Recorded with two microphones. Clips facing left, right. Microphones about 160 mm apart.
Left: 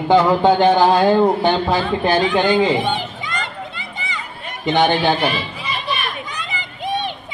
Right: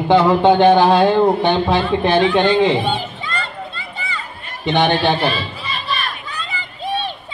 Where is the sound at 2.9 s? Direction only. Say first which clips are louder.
Right 1 dB; 15° left (ahead or behind).